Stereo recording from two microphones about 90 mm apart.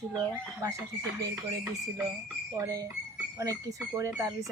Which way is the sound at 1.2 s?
45° right (ahead or behind).